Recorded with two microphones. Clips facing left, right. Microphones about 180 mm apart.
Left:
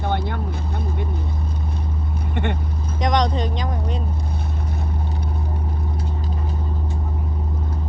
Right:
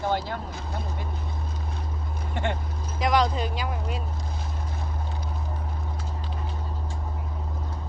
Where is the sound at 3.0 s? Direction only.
5° right (ahead or behind).